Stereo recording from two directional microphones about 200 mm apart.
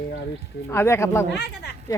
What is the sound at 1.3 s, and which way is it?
Speech, 60° left (ahead or behind).